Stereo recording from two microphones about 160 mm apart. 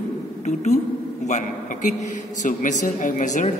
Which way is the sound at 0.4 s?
45° left (ahead or behind).